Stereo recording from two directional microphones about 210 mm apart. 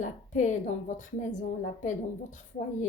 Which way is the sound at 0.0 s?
35° left (ahead or behind).